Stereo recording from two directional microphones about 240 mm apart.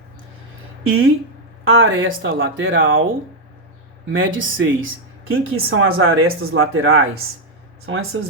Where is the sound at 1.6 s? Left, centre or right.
Right.